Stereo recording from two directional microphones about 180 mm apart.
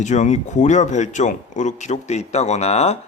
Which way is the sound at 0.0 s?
40° left (ahead or behind).